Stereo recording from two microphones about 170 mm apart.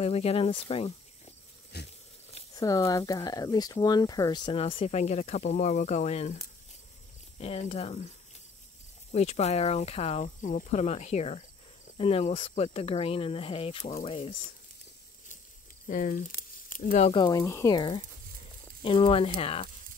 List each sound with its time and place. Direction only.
0.0 s speech: 35° left (ahead or behind)
1.7 s a sound: 75° left (ahead or behind)
2.5 s speech: 20° left (ahead or behind); by 8.1 s 35° left (ahead or behind)
9.1 s speech: 40° left (ahead or behind)
15.9 s speech: 50° left (ahead or behind)
17.1 s speech: 25° left (ahead or behind)